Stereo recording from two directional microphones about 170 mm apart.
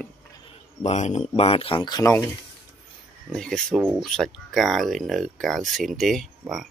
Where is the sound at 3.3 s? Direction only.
5° left (ahead or behind).